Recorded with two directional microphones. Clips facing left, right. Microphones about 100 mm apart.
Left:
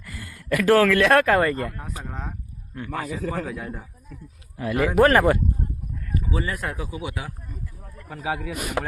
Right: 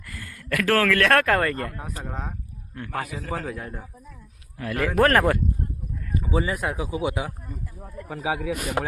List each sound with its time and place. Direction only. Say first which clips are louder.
0.0 s a man's voice: even; 10° left (ahead or behind)
4.5 s speech: left 3 dB; 15° left (ahead or behind)
4.9 s a man's voice: left 2 dB; 5° left (ahead or behind)
6.1 s speech: right 2 dB; 20° right (ahead or behind)
8.0 s a man's voice: right 2 dB; 10° right (ahead or behind)